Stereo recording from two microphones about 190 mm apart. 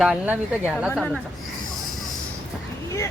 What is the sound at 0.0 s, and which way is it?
Speech, 5° right (ahead or behind).